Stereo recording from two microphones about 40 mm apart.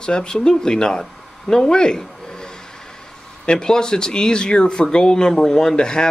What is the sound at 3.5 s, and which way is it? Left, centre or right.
Speech, centre.